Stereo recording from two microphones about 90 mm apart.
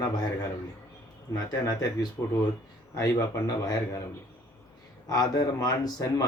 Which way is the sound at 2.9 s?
40° left (ahead or behind).